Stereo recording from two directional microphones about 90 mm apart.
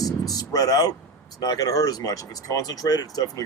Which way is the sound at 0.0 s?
40° left (ahead or behind).